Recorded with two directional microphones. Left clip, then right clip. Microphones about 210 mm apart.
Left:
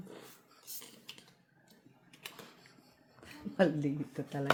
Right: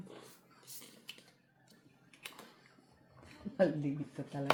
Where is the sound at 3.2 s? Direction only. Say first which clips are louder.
Left 1 dB; 45° left (ahead or behind).